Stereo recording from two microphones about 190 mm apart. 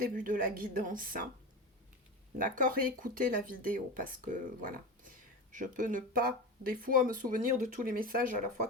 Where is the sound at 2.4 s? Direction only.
45° right (ahead or behind).